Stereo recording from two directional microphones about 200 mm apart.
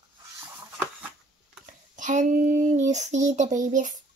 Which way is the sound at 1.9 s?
40° right (ahead or behind).